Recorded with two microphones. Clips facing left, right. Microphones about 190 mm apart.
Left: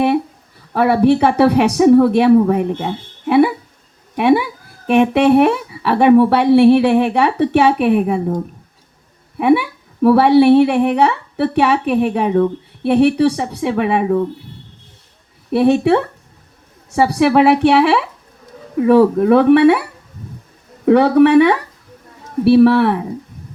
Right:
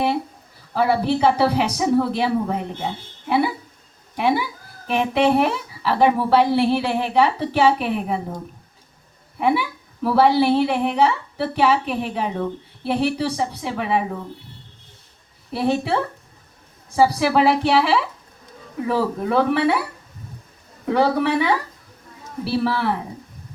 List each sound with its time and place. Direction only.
0.7 s a woman's voice: 65° left (ahead or behind)
9.4 s a woman's voice: 65° left (ahead or behind)
15.5 s a woman's voice: 65° left (ahead or behind)
20.8 s a woman's voice: 65° left (ahead or behind)